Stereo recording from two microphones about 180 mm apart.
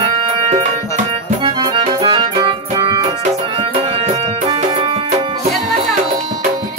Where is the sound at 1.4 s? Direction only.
25° right (ahead or behind).